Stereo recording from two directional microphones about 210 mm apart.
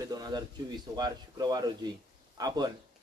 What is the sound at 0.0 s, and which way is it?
A man's voice, 20° right (ahead or behind).